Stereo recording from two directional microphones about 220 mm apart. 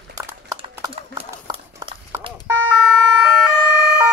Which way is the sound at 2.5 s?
5° right (ahead or behind).